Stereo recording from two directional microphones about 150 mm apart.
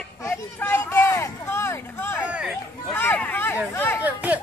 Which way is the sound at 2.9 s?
15° left (ahead or behind).